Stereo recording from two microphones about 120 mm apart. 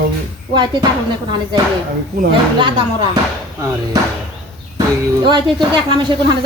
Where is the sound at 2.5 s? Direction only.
40° right (ahead or behind).